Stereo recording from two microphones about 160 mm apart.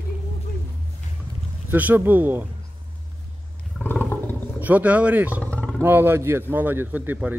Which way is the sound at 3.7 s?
10° left (ahead or behind).